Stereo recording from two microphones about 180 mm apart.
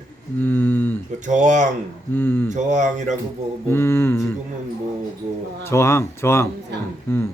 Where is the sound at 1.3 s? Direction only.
40° right (ahead or behind).